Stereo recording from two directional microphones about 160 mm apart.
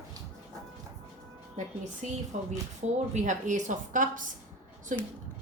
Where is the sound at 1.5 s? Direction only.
50° right (ahead or behind).